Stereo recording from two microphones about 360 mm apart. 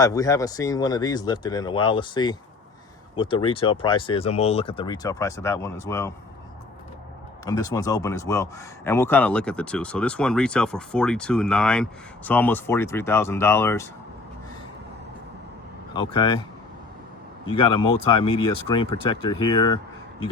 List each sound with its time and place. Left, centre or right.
0.0 s speech: centre
7.4 s speech: centre
15.9 s speech: centre
17.5 s speech: centre
17.7 s speech: left
18.1 s speech: centre